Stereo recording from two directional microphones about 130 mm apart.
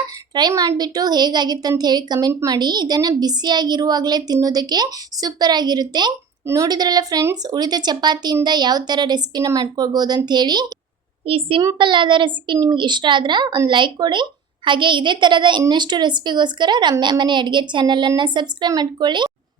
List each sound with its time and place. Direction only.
0.3 s a woman's voice: 30° right (ahead or behind)
11.3 s a woman's voice: 45° right (ahead or behind)